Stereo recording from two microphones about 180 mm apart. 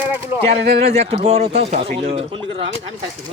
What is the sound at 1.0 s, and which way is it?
Speech, 35° right (ahead or behind).